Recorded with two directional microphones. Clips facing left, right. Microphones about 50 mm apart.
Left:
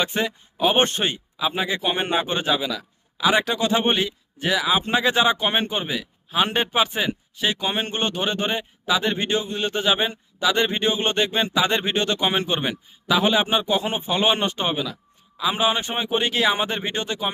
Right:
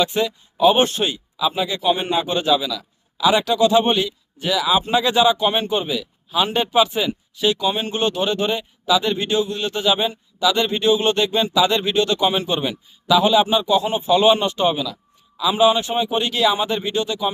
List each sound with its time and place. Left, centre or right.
0.0 s a man's voice: left